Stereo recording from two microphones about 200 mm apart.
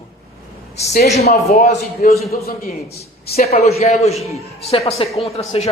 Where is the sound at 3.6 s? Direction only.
35° left (ahead or behind).